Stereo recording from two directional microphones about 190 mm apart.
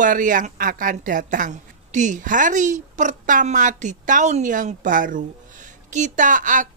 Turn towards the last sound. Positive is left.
turn(degrees=-45)  # may be behind; listen again after turning